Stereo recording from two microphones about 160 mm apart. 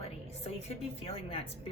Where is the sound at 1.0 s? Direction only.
35° left (ahead or behind).